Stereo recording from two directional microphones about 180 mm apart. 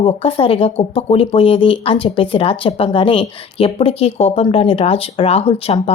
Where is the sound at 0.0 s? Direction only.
30° left (ahead or behind).